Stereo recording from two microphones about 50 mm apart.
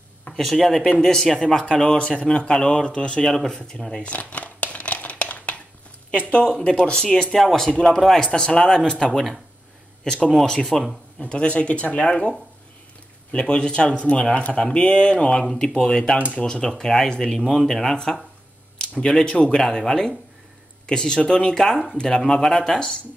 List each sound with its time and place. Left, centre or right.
0.3 s speech: centre
3.3 s speech: centre
4.0 s crumpling: left
6.6 s speech: centre
7.1 s speech: centre
8.2 s speech: centre
9.1 s speech: centre
10.0 s speech: centre
10.3 s speech: centre
11.1 s speech: left
18.8 s speech: centre